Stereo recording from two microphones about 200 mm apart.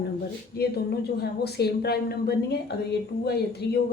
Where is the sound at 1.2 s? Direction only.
55° left (ahead or behind).